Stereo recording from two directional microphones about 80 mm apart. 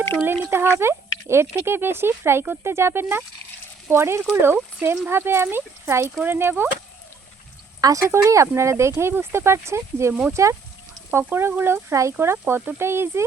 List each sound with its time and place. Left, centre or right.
0.5 s speech: right
7.8 s speech: right
8.1 s speech: right